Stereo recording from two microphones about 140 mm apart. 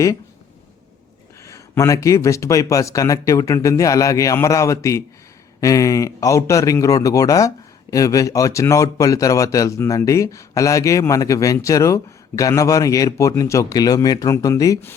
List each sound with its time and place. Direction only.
1.5 s speech: 20° left (ahead or behind)